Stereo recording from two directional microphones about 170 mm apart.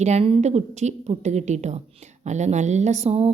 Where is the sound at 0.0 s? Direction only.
40° right (ahead or behind).